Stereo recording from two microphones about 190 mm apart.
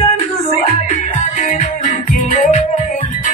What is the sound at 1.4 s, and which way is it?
Music, 40° left (ahead or behind).